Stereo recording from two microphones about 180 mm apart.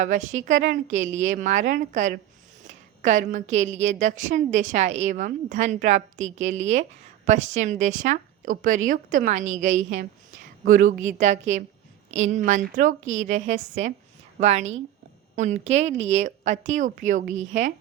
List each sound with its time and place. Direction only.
0.0 s a woman's voice: 45° right (ahead or behind)